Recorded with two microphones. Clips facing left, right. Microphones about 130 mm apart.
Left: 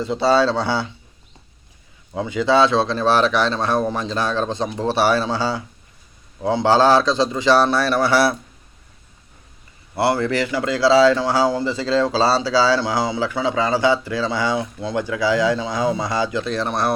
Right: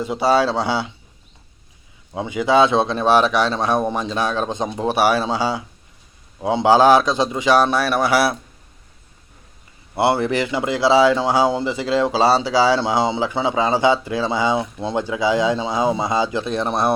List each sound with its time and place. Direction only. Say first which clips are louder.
0.0 s speech: even; 15° right (ahead or behind)
2.1 s speech: right 1 dB; 15° right (ahead or behind)
9.9 s speech: right 1 dB; 20° right (ahead or behind)